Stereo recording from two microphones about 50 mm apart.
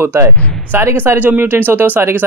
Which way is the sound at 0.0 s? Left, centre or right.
Right.